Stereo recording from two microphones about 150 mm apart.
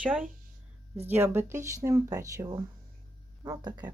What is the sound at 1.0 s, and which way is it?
Speech, 15° right (ahead or behind).